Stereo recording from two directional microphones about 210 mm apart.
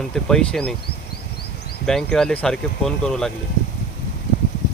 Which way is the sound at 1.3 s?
50° left (ahead or behind).